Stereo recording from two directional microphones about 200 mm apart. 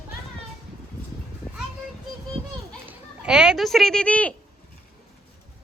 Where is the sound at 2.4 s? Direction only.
30° right (ahead or behind).